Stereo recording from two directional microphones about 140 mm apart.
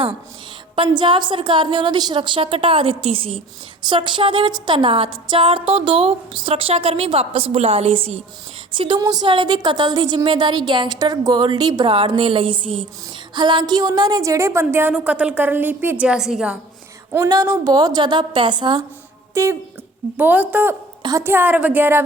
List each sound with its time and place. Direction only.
0.8 s a woman's voice: 35° right (ahead or behind); by 16.6 s 5° right (ahead or behind)
17.1 s a woman's voice: 25° right (ahead or behind)
19.3 s a woman's voice: 20° right (ahead or behind)
21.0 s a woman's voice: 25° right (ahead or behind)